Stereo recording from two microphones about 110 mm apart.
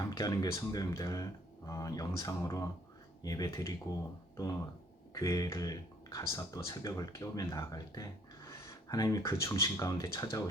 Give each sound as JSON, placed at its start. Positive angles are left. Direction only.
{"t": 0.0, "sound": "speech", "side_deg": 35}
{"t": 5.1, "sound": "speech", "side_deg": 30}
{"t": 7.4, "sound": "a sound", "side_deg": 30}
{"t": 9.0, "sound": "speech", "side_deg": 30}